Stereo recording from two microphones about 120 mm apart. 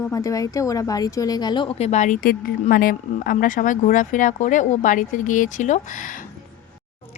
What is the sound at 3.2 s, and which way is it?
Speech, 90° left.